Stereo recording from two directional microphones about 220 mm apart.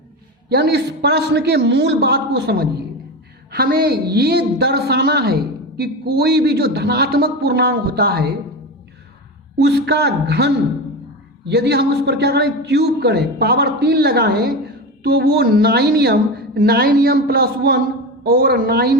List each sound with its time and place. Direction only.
0.5 s a woman's voice: 45° right (ahead or behind)
9.6 s a woman's voice: 50° right (ahead or behind)